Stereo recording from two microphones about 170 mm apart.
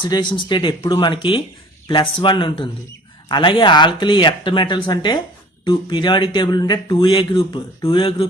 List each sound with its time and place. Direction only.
0.0 s speech: 25° left (ahead or behind)